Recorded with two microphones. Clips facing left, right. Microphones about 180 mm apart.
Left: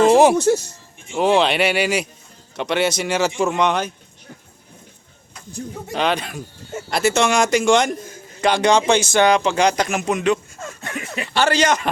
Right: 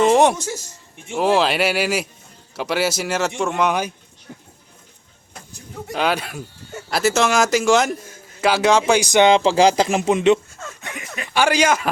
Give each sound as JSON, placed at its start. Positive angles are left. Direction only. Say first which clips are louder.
{"t": 0.1, "sound": "a man's voice", "louder": "left 2 dB", "side_deg": 0}
{"t": 0.3, "sound": "speech", "louder": "left 13 dB", "side_deg": 65}
{"t": 1.1, "sound": "a man's voice", "louder": "left 1 dB", "side_deg": -5}
{"t": 4.3, "sound": "music", "louder": "right 2 dB", "side_deg": -10}
{"t": 5.9, "sound": "a man's voice", "louder": "even", "side_deg": -5}
{"t": 11.2, "sound": "a man's voice", "louder": "right 1 dB", "side_deg": -10}